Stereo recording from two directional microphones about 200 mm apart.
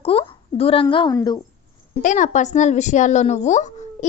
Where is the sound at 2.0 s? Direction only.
40° left (ahead or behind).